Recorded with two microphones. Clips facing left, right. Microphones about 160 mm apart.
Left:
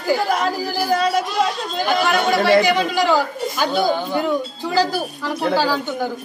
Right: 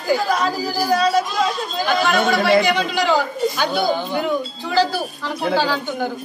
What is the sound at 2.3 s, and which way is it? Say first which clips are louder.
Speech: left 4 dB; 45° left (ahead or behind).